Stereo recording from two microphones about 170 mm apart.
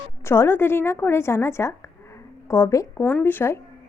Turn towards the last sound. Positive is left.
turn(degrees=15)  # may be behind; listen again after turning